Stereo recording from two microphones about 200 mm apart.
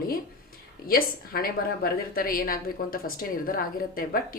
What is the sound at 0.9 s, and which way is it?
A woman's voice, 45° left (ahead or behind).